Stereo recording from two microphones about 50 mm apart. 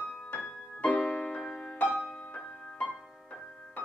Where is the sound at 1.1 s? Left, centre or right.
Left.